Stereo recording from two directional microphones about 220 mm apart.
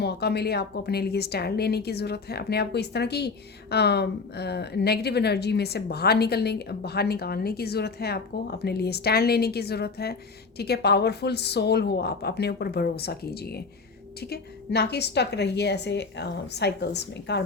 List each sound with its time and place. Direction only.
0.0 s speech: 50° left (ahead or behind)